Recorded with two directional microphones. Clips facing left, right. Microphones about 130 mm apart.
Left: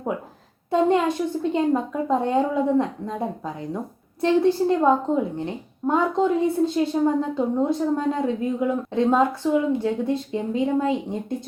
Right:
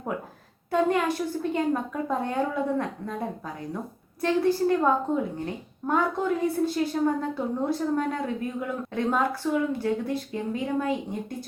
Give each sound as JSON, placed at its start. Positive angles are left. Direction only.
{"t": 0.7, "sound": "a woman's voice", "side_deg": 25}